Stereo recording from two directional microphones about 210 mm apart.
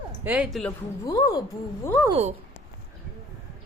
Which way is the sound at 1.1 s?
15° left (ahead or behind).